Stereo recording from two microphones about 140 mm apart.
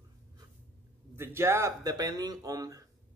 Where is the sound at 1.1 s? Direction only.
20° right (ahead or behind).